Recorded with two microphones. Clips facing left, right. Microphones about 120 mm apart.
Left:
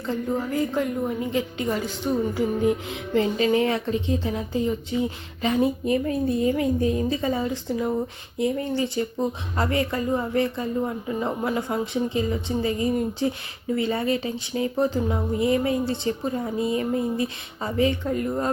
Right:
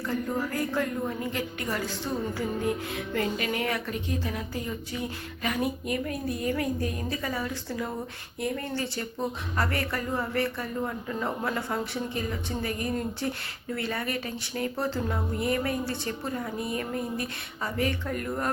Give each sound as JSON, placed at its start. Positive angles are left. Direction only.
{"t": 0.0, "sound": "a woman's voice", "side_deg": 20}